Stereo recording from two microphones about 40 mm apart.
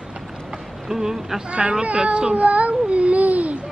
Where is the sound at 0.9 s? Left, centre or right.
Centre.